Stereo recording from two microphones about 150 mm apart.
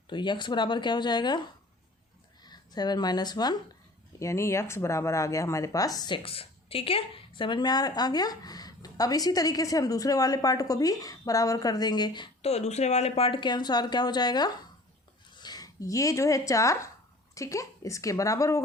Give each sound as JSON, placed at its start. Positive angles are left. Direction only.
{"t": 0.1, "sound": "speech", "side_deg": 30}
{"t": 2.4, "sound": "a woman's voice", "side_deg": 30}
{"t": 6.2, "sound": "a woman's voice", "side_deg": 40}
{"t": 12.4, "sound": "a woman's voice", "side_deg": 45}